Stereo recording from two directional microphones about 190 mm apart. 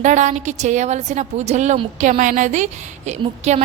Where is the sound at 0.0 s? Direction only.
40° right (ahead or behind).